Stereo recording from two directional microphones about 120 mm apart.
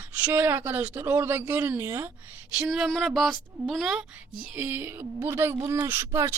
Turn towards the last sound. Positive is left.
turn(degrees=-25)  # may be behind; listen again after turning